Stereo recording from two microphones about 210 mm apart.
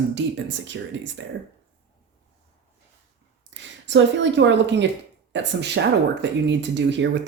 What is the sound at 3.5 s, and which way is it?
Speech, 60° right (ahead or behind).